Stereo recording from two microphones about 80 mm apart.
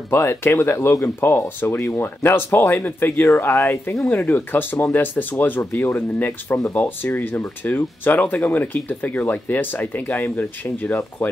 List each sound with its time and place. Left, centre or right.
0.1 s speech: left
4.1 s speech: left